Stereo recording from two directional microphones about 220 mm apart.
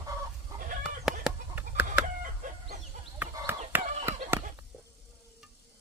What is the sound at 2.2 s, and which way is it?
Chicken, 35° right (ahead or behind).